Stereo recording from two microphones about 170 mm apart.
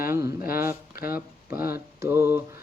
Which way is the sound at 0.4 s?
60° left (ahead or behind).